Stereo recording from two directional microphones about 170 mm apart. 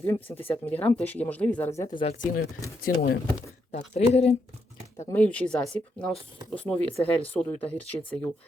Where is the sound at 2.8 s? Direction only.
60° left (ahead or behind).